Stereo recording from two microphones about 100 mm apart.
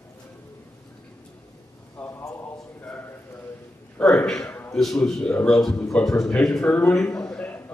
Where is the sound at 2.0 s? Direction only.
25° left (ahead or behind).